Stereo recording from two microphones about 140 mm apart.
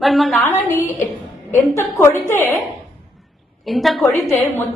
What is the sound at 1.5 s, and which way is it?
A woman's voice, 20° left (ahead or behind).